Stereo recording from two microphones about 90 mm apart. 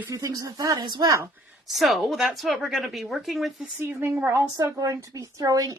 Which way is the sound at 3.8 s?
25° right (ahead or behind).